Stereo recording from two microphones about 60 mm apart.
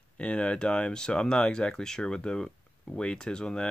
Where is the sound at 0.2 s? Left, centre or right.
Centre.